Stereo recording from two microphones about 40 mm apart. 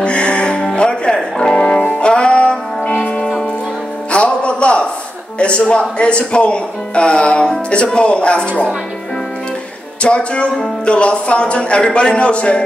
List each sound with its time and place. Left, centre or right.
0.0 s music: left
4.1 s music: left
5.4 s speech: left
10.0 s speech: left